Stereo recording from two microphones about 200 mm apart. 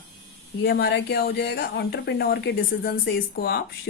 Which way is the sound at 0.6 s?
55° left (ahead or behind).